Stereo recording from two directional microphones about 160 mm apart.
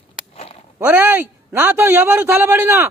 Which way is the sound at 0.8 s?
10° right (ahead or behind).